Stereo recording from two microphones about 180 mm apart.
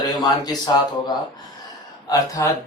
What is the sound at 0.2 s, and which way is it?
Speech, 20° left (ahead or behind).